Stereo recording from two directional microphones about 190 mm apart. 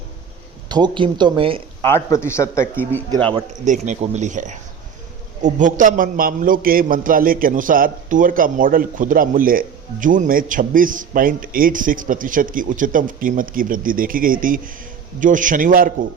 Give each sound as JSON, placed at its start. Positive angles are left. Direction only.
{"t": 0.7, "sound": "speech", "side_deg": -25}
{"t": 1.8, "sound": "a man's voice", "side_deg": 15}
{"t": 3.7, "sound": "a man's voice", "side_deg": -40}